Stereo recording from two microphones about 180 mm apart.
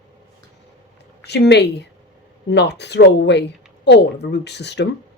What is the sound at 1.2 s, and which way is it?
Speech, 70° left (ahead or behind).